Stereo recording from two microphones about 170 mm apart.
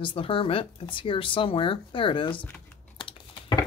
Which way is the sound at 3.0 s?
30° left (ahead or behind).